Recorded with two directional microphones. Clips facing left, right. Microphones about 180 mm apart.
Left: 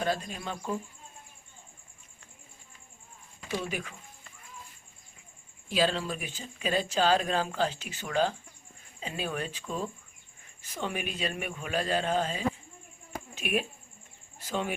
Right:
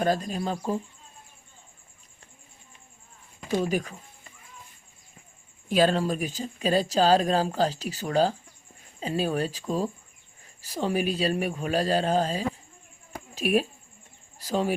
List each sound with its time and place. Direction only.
0.0 s speech: 40° right (ahead or behind)
3.5 s speech: 40° right (ahead or behind)
5.6 s speech: 50° right (ahead or behind)